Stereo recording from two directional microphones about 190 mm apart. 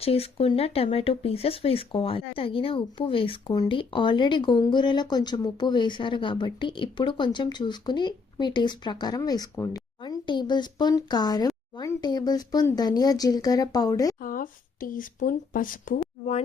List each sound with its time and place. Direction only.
0.0 s speech: 30° left (ahead or behind)
14.2 s speech: 45° left (ahead or behind)